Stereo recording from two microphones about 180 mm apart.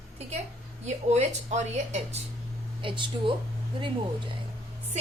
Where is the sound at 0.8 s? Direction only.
40° right (ahead or behind).